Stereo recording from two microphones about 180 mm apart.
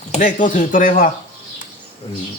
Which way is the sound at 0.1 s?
45° left (ahead or behind).